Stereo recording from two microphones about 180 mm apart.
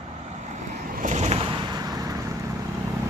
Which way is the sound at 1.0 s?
40° right (ahead or behind).